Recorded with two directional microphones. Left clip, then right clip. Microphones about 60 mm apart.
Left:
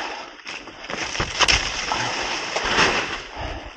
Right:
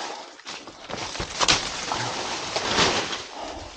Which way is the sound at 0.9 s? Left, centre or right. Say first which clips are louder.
Left 5 dB; left.